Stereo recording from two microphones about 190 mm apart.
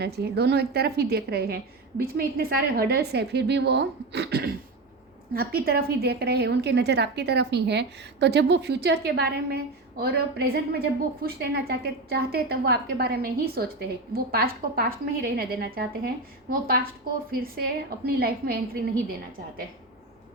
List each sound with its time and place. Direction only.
0.0 s a woman's voice: 60° right (ahead or behind)